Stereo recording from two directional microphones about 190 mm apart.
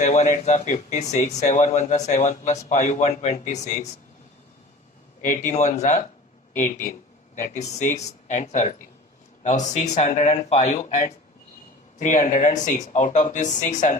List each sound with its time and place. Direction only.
0.0 s speech: 40° left (ahead or behind)
5.5 s speech: 40° left (ahead or behind)
7.4 s speech: 40° left (ahead or behind)